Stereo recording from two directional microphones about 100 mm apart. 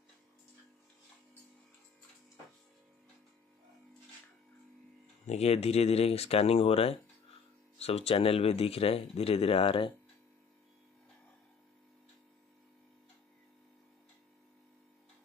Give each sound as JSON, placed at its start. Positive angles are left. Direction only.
{"t": 5.4, "sound": "speech", "side_deg": 90}